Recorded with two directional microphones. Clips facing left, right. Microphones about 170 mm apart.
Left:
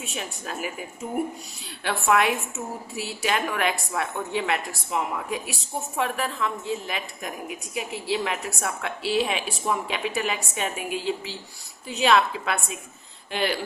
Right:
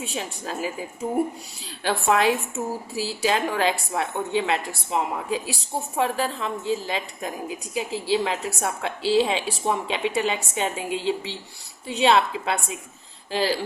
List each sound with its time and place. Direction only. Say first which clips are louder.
0.0 s a woman's voice: right 3 dB; 30° right (ahead or behind)